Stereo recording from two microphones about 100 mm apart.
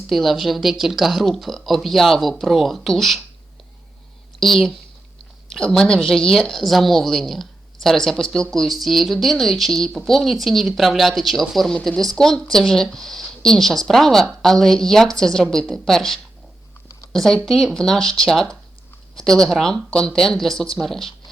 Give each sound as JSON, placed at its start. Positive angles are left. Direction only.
{"t": 0.1, "sound": "a woman's voice", "side_deg": 0}
{"t": 4.4, "sound": "a woman's voice", "side_deg": 0}